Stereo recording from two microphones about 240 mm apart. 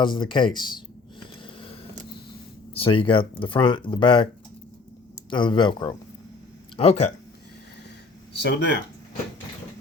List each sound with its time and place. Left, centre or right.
0.0 s speech: centre
1.5 s vehicle: left
2.7 s speech: left
5.3 s speech: centre
8.3 s speech: left